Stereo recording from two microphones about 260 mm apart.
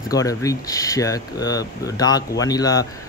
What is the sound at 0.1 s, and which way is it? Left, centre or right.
Speech, centre.